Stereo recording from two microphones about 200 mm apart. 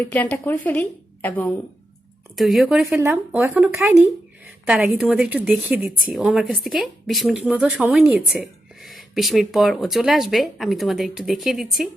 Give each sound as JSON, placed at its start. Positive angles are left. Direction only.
{"t": 0.0, "sound": "a woman's voice", "side_deg": 10}